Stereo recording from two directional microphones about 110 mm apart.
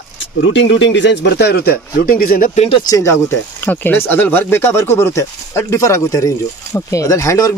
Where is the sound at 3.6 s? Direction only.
15° left (ahead or behind).